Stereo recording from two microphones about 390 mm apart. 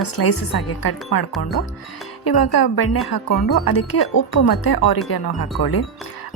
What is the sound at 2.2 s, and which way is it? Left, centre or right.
A woman's voice, left.